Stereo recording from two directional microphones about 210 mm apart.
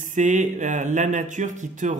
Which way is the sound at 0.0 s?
35° right (ahead or behind).